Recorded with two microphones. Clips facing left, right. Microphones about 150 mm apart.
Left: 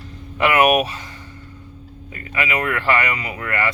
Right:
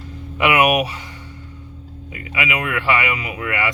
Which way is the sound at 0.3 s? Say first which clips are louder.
Left 1 dB; 10° right (ahead or behind).